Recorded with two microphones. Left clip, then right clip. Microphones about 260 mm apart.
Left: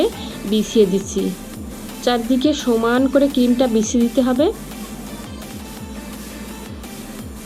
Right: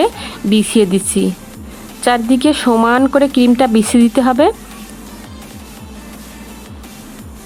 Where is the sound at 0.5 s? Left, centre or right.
Right.